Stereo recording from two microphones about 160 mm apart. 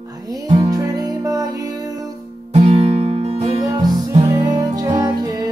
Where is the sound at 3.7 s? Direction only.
25° right (ahead or behind).